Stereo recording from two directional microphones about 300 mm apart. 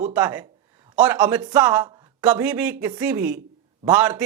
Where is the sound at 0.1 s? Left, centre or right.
Centre.